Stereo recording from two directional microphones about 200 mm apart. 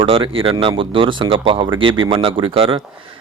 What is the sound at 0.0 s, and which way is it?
Speech, 25° right (ahead or behind).